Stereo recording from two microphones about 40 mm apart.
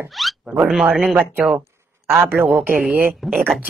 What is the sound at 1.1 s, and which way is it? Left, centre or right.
Speech, right.